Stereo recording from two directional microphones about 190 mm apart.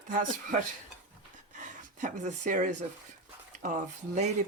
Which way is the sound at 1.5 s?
40° right (ahead or behind).